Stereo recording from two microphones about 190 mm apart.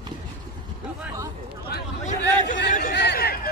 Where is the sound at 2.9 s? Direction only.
60° left (ahead or behind).